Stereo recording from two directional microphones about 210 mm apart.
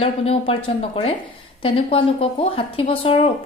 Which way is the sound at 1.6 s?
25° left (ahead or behind).